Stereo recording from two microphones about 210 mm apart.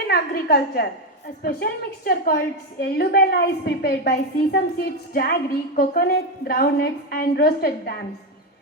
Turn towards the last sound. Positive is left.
turn(degrees=50)  # may be behind; listen again after turning